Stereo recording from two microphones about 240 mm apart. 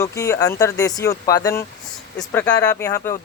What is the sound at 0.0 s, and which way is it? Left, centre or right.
Speech, centre.